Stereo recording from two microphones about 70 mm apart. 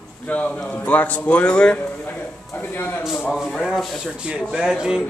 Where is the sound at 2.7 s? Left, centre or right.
Left.